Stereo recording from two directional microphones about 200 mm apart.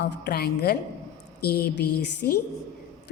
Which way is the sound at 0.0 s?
50° left (ahead or behind).